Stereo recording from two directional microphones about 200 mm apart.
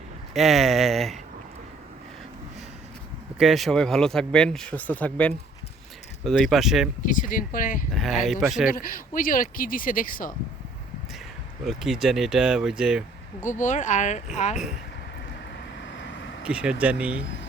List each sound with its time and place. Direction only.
0.3 s speech: centre (ahead or behind)
3.3 s speech: centre (ahead or behind)
7.0 s speech: 40° left (ahead or behind)
7.9 s speech: centre (ahead or behind)
8.7 s speech: 45° left (ahead or behind)
11.6 s speech: centre (ahead or behind)
13.4 s speech: 40° left (ahead or behind)
16.4 s speech: 5° right (ahead or behind)
17.2 s speech: 65° left (ahead or behind)